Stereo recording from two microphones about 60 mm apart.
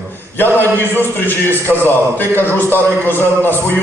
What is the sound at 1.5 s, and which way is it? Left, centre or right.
A man's voice, left.